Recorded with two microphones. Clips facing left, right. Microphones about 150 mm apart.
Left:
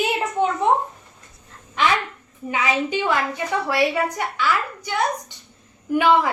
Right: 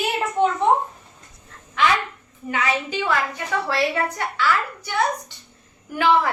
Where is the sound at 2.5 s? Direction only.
15° left (ahead or behind).